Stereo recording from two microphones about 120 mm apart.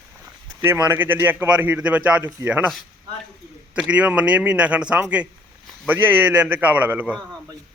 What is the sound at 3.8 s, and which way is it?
Speech, 10° right (ahead or behind).